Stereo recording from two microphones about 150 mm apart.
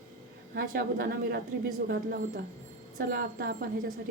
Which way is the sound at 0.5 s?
80° right.